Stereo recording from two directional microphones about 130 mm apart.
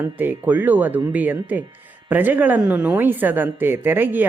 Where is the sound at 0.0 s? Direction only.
15° right (ahead or behind).